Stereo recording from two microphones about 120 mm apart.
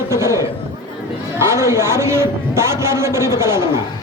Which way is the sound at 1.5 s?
20° right (ahead or behind).